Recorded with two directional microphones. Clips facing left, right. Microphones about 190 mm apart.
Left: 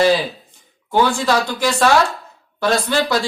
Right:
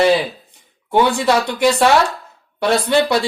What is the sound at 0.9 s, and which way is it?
Speech, 25° right (ahead or behind).